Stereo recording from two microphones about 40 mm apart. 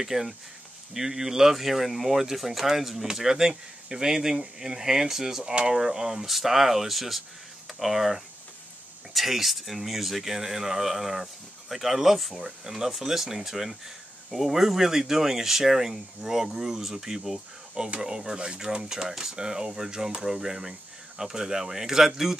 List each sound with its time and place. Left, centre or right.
0.0 s speech: centre
5.4 s speech: right
5.7 s speech: centre
17.7 s speech: right; by 19.3 s centre
19.3 s speech: centre